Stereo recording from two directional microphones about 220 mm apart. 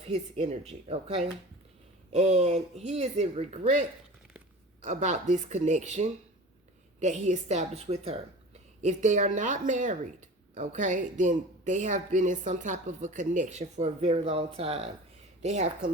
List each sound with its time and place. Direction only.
0.0 s a woman's voice: 30° right (ahead or behind)
4.9 s speech: 35° right (ahead or behind)